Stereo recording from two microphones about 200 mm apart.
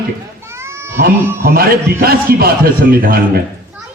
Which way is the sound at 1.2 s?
10° right (ahead or behind).